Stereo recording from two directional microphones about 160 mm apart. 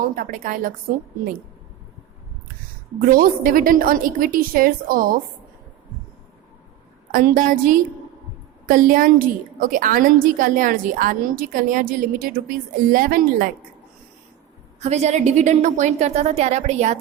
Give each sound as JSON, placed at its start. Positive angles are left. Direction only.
{"t": 0.0, "sound": "a woman's voice", "side_deg": -60}
{"t": 3.1, "sound": "a woman's voice", "side_deg": -60}
{"t": 7.1, "sound": "a woman's voice", "side_deg": -60}
{"t": 14.8, "sound": "a woman's voice", "side_deg": -45}